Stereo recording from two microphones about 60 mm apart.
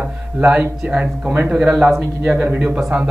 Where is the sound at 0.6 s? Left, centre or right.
Right.